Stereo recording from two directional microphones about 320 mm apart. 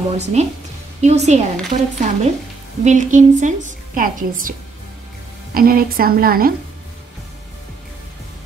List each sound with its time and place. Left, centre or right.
0.1 s a woman's voice: right